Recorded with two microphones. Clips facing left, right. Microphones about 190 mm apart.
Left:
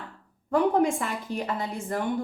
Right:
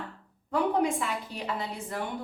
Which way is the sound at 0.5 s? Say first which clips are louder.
Left 4 dB; 45° left (ahead or behind).